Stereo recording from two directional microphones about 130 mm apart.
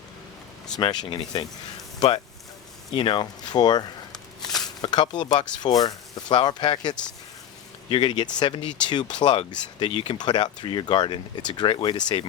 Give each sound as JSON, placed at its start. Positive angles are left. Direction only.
{"t": 0.8, "sound": "speech", "side_deg": 35}